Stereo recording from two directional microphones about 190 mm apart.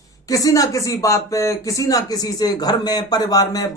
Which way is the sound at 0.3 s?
20° left (ahead or behind).